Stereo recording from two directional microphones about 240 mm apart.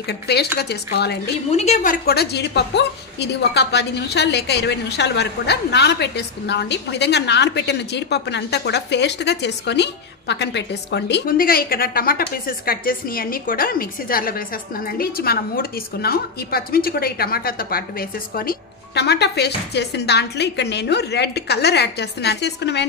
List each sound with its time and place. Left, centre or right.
0.0 s a woman's voice: left
1.5 s a woman's voice: left